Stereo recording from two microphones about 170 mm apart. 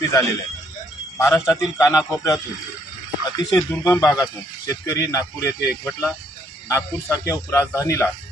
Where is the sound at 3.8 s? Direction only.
15° left (ahead or behind).